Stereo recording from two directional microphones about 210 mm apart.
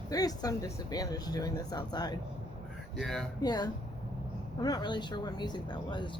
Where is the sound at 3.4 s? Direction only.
20° left (ahead or behind).